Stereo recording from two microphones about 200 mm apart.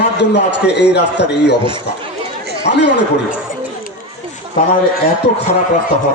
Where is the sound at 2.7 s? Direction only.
55° left (ahead or behind).